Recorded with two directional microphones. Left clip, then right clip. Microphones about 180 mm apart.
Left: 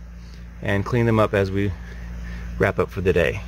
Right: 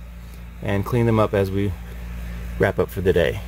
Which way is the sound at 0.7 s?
15° right (ahead or behind).